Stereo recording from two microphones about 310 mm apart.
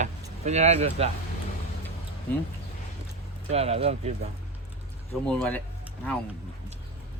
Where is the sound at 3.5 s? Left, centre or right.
Centre.